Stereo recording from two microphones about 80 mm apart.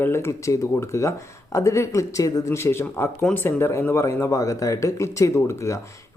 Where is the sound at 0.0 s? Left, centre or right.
Left.